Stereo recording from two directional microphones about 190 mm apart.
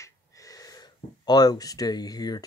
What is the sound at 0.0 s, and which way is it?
Speech, 15° left (ahead or behind).